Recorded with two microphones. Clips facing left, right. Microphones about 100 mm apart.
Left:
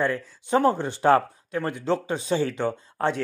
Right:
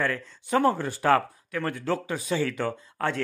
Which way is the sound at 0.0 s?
20° left (ahead or behind).